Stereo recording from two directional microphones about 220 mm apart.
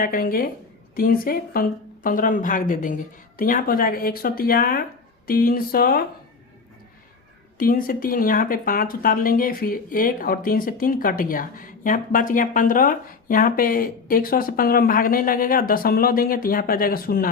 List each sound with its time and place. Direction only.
0.0 s speech: 40° left (ahead or behind)
7.6 s speech: 40° left (ahead or behind)